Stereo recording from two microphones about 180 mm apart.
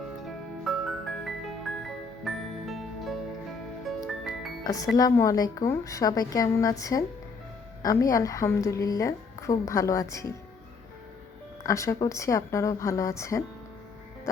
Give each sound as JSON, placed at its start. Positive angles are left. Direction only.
{"t": 0.6, "sound": "music", "side_deg": 0}
{"t": 4.6, "sound": "a woman's voice", "side_deg": 20}
{"t": 11.6, "sound": "a woman's voice", "side_deg": 15}